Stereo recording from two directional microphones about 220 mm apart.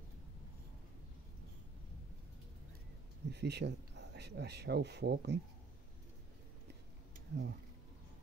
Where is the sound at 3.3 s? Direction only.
50° right (ahead or behind).